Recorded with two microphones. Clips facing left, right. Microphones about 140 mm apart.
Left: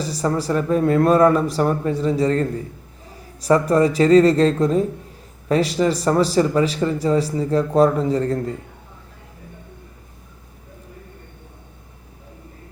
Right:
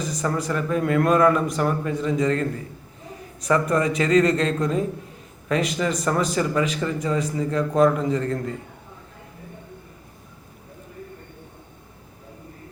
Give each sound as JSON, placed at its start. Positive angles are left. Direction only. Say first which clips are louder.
{"t": 0.0, "sound": "speech", "louder": "left 4 dB", "side_deg": 30}